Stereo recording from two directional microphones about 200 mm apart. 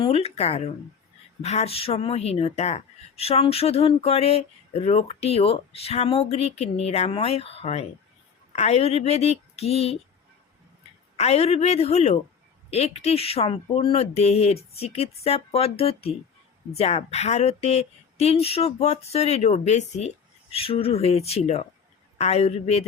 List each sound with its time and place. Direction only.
0.0 s speech: 30° left (ahead or behind)
11.2 s speech: 30° left (ahead or behind)